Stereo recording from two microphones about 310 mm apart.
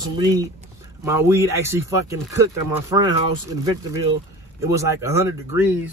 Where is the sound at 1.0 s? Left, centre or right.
Centre.